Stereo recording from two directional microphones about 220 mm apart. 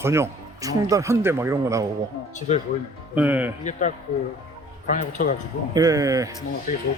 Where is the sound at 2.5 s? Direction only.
30° left (ahead or behind).